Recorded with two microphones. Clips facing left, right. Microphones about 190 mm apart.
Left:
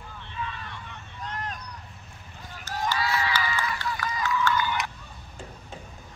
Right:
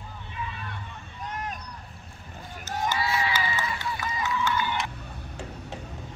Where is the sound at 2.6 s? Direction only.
20° right (ahead or behind).